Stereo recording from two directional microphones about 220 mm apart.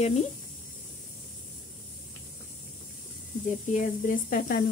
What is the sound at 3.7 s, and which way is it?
Speech, 40° left (ahead or behind).